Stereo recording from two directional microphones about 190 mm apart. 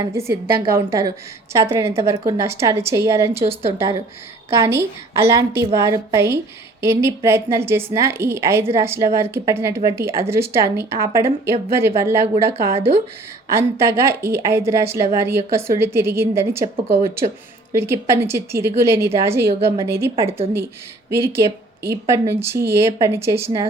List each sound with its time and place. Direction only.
0.0 s speech: 15° right (ahead or behind)
17.7 s speech: 15° right (ahead or behind)